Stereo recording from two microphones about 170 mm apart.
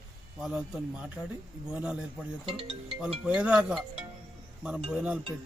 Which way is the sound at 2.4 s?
30° right (ahead or behind).